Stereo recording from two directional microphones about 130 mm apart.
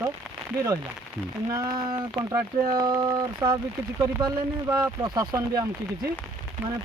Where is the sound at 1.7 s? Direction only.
35° right (ahead or behind).